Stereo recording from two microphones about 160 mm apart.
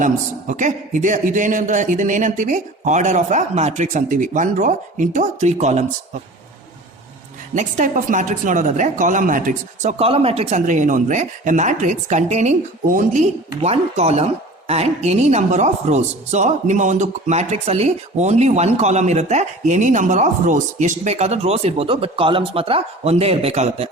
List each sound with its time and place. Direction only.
0.0 s a man's voice: 50° right (ahead or behind)
7.5 s a man's voice: 50° right (ahead or behind)
10.0 s a man's voice: 40° right (ahead or behind)
12.9 s speech: 60° right (ahead or behind)
13.6 s a man's voice: 40° right (ahead or behind)